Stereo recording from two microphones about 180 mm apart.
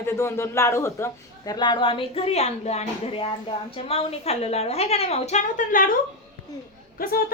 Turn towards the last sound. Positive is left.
turn(degrees=55)  # may be behind; listen again after turning